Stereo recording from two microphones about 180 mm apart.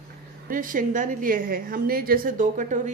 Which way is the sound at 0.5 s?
50° right (ahead or behind).